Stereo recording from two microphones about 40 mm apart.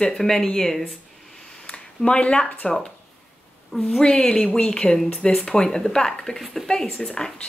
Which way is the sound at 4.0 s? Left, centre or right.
Left.